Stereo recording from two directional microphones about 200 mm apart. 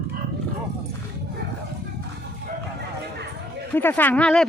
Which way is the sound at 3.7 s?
10° left (ahead or behind).